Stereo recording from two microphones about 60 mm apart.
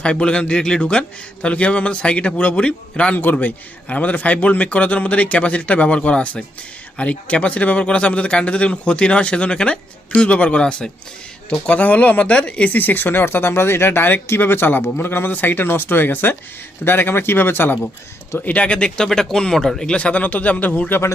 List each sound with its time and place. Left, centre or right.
0.0 s speech: centre
12.7 s speech: left
18.3 s speech: left
19.0 s speech: centre
20.0 s speech: left